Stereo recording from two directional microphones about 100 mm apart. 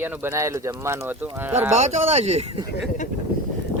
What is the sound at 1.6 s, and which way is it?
Speech, 90° right.